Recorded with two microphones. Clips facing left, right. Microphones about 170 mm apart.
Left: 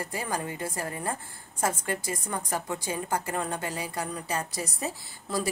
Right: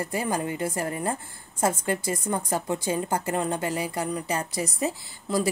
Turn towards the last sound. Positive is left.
turn(degrees=-20)  # may be behind; listen again after turning